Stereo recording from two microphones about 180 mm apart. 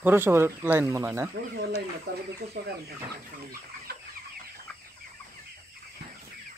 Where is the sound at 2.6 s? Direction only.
65° right (ahead or behind).